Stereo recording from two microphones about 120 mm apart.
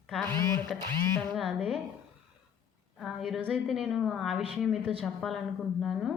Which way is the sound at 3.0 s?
Centre (ahead or behind).